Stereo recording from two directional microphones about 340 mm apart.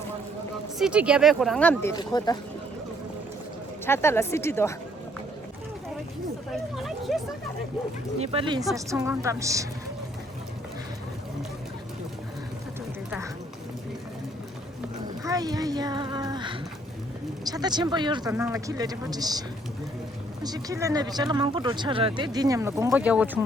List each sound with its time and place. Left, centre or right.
0.8 s speech: centre
3.8 s speech: centre
6.7 s a sound: centre
8.2 s speech: centre
15.2 s a child's voice: centre